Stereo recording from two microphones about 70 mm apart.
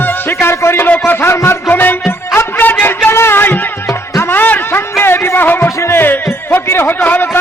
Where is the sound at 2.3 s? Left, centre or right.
Left.